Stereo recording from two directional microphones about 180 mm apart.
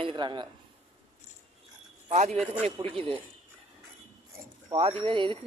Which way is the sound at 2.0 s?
40° right (ahead or behind).